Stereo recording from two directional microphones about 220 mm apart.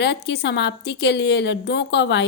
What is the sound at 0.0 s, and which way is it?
A woman's voice, 50° left (ahead or behind).